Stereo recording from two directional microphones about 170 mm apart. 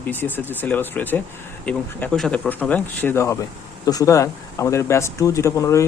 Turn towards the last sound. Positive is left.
turn(degrees=15)  # may be behind; listen again after turning